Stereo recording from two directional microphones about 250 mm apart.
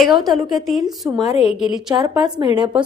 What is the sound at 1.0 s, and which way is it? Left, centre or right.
Speech, centre.